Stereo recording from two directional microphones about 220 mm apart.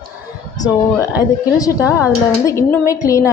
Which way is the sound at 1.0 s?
15° left (ahead or behind).